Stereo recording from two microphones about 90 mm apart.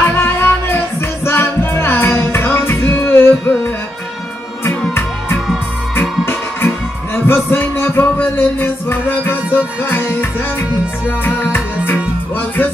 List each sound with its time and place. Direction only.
0.0 s music: 25° left (ahead or behind)
4.6 s music: 25° left (ahead or behind)
11.1 s music: 25° left (ahead or behind)